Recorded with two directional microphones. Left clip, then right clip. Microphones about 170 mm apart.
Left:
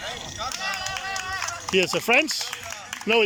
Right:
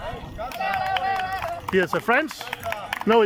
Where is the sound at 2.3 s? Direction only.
60° right (ahead or behind).